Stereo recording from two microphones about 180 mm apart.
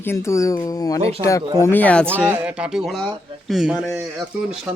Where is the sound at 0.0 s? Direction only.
15° left (ahead or behind).